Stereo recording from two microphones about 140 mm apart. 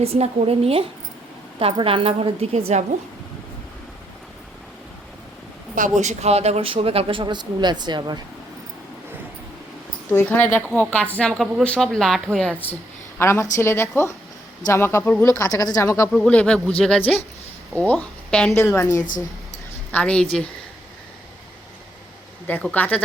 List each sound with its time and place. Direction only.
0.0 s speech: 45° right (ahead or behind)
5.7 s speech: 65° right (ahead or behind); by 8.2 s 30° right (ahead or behind)
10.2 s a woman's voice: 15° left (ahead or behind)
13.1 s speech: 20° left (ahead or behind)
16.1 s speech: 5° left (ahead or behind)
17.7 s speech: 10° left (ahead or behind)
19.9 s speech: 10° left (ahead or behind)
22.4 s speech: 10° left (ahead or behind)